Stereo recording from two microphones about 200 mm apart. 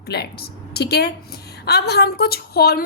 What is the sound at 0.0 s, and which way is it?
A woman's voice, 55° left (ahead or behind).